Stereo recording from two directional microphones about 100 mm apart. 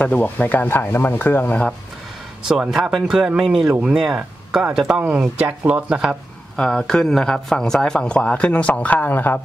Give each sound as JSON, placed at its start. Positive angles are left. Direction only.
{"t": 0.0, "sound": "speech", "side_deg": 15}
{"t": 2.4, "sound": "speech", "side_deg": -5}
{"t": 6.5, "sound": "speech", "side_deg": 5}